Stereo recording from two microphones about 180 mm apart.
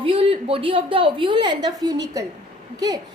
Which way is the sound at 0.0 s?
30° right (ahead or behind).